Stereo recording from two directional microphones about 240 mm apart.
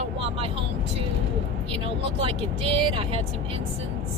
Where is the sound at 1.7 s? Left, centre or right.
Right.